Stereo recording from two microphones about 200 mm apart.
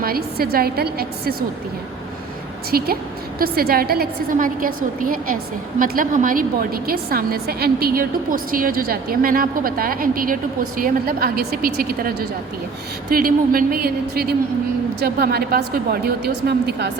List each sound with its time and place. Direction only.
0.0 s a woman's voice: 50° right (ahead or behind)
2.6 s a woman's voice: 50° right (ahead or behind)